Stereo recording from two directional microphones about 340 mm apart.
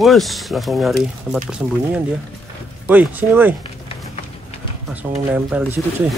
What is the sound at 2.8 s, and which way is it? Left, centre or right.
Speech, centre.